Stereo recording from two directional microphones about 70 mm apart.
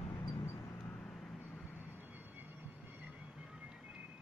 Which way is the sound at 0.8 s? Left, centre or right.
Centre.